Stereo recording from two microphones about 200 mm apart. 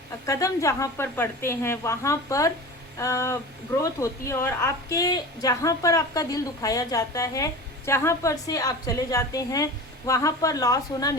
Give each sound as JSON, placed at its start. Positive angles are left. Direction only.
{"t": 0.3, "sound": "a woman's voice", "side_deg": 15}